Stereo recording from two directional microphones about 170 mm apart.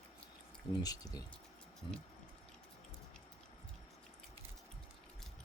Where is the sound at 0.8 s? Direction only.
20° left (ahead or behind).